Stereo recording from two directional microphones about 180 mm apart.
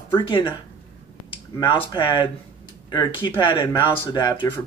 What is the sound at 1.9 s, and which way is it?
Speech, 25° left (ahead or behind).